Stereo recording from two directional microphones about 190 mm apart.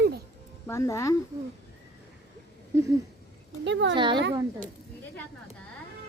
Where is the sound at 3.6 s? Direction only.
75° right (ahead or behind).